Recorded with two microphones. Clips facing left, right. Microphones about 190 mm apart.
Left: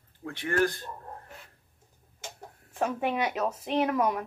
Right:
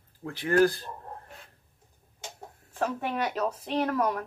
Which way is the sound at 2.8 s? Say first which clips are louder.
Left 1 dB; 10° left (ahead or behind).